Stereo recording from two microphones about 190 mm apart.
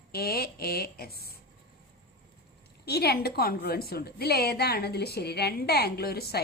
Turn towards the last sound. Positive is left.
turn(degrees=55)  # may be behind; listen again after turning